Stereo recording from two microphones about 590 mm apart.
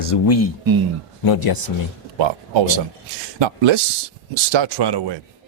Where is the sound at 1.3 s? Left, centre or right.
Left.